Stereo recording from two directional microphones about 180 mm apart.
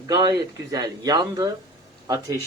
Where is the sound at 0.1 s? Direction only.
25° right (ahead or behind).